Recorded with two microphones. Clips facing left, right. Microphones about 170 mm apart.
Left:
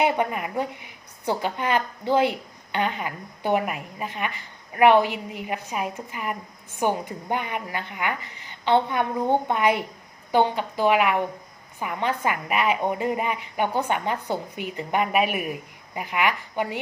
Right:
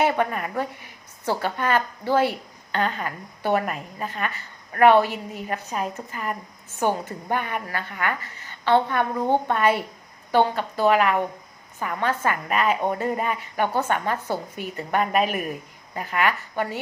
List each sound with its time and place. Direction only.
0.0 s a woman's voice: 15° left (ahead or behind)